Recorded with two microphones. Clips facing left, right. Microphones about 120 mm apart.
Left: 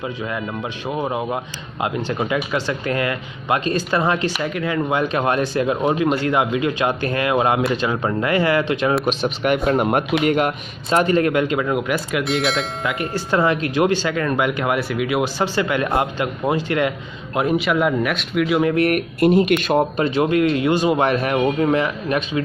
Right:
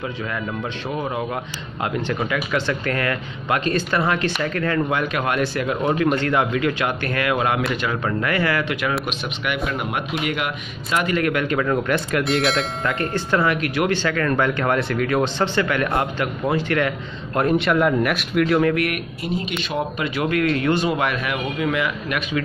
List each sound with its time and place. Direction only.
0.0 s speech: 15° left (ahead or behind)
9.0 s speech: 40° left (ahead or behind); by 11.8 s 15° left (ahead or behind)
11.9 s speech: centre (ahead or behind)
13.1 s speech: 20° left (ahead or behind)
17.3 s speech: 5° left (ahead or behind)
18.8 s speech: 40° left (ahead or behind)
19.1 s speech: 60° left (ahead or behind)
20.0 s speech: 25° left (ahead or behind)
21.0 s speech: 35° left (ahead or behind)